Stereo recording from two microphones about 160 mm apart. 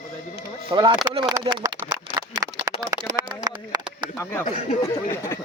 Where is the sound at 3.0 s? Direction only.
30° right (ahead or behind).